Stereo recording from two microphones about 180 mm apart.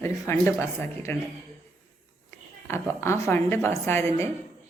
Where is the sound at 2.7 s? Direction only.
15° left (ahead or behind).